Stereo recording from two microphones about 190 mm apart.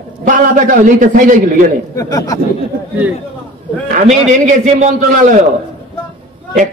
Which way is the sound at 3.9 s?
40° right (ahead or behind).